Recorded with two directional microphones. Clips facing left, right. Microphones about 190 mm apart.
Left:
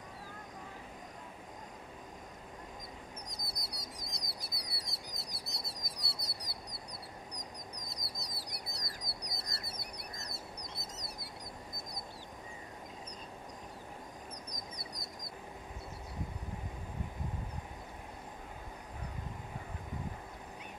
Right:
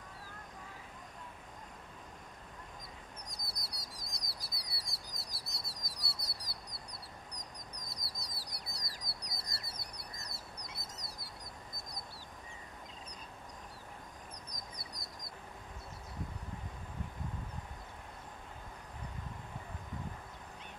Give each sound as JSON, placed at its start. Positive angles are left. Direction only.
{"t": 3.2, "sound": "bird", "side_deg": 20}
{"t": 3.6, "sound": "a sound", "side_deg": 20}
{"t": 4.4, "sound": "bird", "side_deg": 20}
{"t": 6.7, "sound": "duck", "side_deg": 0}
{"t": 7.7, "sound": "bird", "side_deg": 20}
{"t": 9.0, "sound": "duck", "side_deg": 20}
{"t": 14.7, "sound": "duck", "side_deg": 20}